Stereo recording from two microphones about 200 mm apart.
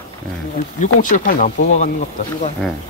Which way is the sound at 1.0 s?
45° left (ahead or behind).